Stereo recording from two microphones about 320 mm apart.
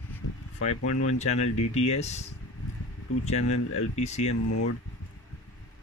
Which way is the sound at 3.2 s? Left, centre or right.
Left.